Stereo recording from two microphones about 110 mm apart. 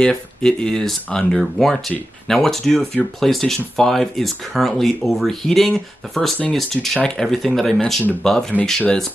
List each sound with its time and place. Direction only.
0.0 s speech: 5° left (ahead or behind)